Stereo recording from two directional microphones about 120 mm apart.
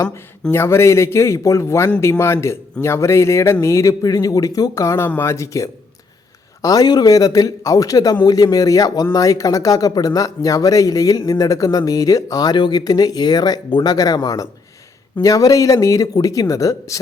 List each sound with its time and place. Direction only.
0.5 s a man's voice: 20° left (ahead or behind)